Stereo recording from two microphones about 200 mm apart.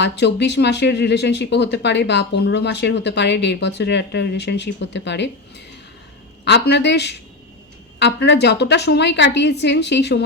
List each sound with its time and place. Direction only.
0.0 s speech: 60° left (ahead or behind)